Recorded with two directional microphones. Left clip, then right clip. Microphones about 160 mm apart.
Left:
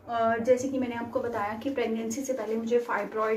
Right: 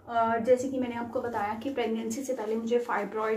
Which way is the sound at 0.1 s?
10° right (ahead or behind).